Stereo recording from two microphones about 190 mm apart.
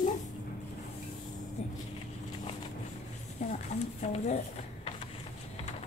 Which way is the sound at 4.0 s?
35° left (ahead or behind).